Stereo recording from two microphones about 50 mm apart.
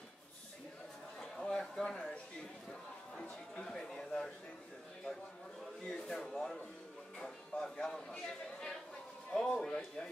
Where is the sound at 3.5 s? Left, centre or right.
Centre.